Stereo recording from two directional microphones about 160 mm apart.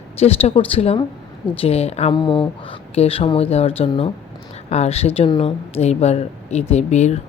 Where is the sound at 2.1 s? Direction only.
30° left (ahead or behind).